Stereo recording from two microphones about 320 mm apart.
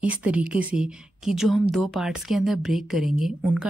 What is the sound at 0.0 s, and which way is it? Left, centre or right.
A woman's voice, centre.